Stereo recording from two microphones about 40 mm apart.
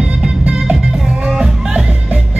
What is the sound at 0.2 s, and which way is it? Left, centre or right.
Music, right.